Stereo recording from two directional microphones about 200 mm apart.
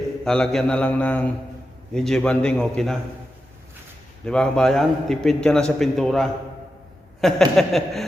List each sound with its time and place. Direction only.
0.3 s a man's voice: 5° left (ahead or behind)
4.3 s a man's voice: 5° left (ahead or behind)